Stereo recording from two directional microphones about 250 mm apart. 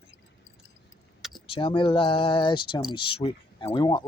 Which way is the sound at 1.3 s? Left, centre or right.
Centre.